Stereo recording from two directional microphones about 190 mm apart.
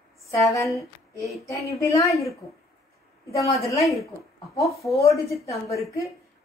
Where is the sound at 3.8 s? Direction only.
Centre (ahead or behind).